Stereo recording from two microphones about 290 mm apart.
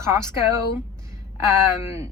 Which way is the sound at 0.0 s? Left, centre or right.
Centre.